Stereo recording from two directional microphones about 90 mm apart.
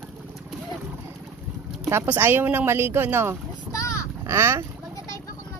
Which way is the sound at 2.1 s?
25° right (ahead or behind).